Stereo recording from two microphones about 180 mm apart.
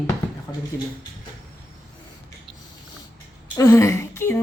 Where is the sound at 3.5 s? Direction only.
15° left (ahead or behind).